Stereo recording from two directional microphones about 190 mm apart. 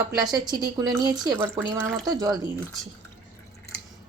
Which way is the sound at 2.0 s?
20° right (ahead or behind).